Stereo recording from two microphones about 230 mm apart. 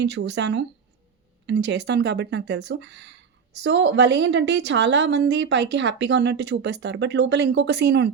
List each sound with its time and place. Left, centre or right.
0.0 s a woman's voice: right